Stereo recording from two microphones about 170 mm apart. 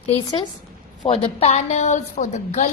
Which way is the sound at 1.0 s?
35° left (ahead or behind).